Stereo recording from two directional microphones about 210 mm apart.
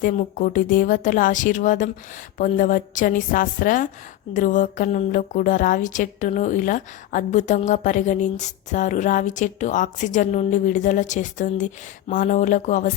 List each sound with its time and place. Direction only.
0.0 s a woman's voice: 40° left (ahead or behind)